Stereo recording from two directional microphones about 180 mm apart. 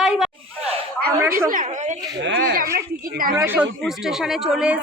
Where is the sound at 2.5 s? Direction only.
55° right (ahead or behind).